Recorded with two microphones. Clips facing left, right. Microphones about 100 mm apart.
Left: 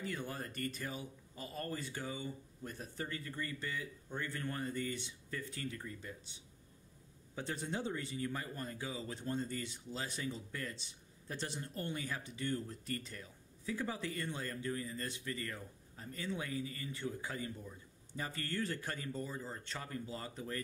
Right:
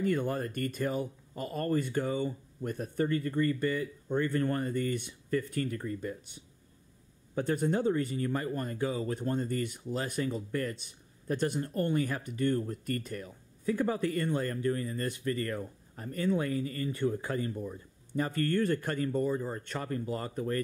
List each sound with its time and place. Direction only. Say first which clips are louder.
0.0 s speech: right 12 dB; 55° right (ahead or behind)